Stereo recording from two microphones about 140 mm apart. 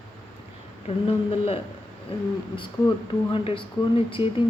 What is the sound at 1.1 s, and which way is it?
Speech, 45° left (ahead or behind).